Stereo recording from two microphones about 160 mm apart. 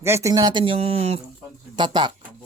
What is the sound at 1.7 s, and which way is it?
Speech, 30° right (ahead or behind).